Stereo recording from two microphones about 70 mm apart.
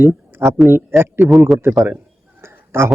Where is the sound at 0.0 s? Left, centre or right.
Right.